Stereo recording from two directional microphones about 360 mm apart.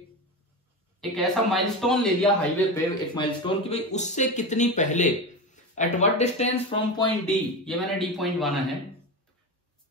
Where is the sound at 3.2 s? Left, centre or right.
Centre.